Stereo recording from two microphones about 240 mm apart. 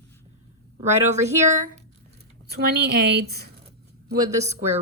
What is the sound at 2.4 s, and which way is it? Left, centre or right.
Speech, right.